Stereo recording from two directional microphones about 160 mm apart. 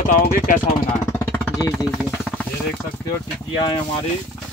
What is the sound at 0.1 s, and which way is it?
Speech, 55° left (ahead or behind).